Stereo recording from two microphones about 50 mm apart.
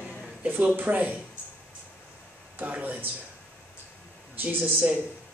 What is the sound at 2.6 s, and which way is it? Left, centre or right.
Speech, right.